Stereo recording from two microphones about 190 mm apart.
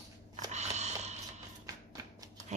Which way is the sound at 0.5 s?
35° right (ahead or behind).